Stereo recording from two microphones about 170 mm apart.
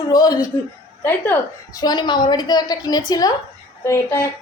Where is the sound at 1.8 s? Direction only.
25° left (ahead or behind).